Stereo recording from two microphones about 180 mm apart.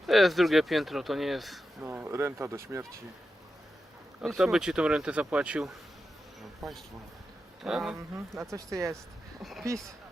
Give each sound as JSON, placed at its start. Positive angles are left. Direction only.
{"t": 0.0, "sound": "speech", "side_deg": 0}
{"t": 1.8, "sound": "speech", "side_deg": -10}
{"t": 4.2, "sound": "speech", "side_deg": 0}
{"t": 8.5, "sound": "speech", "side_deg": -15}
{"t": 9.4, "sound": "speech", "side_deg": 0}